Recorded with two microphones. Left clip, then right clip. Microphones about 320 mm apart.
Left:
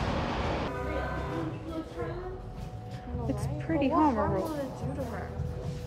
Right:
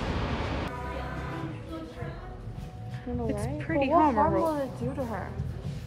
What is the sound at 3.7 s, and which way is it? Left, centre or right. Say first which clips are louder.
Speech: right 3 dB; centre.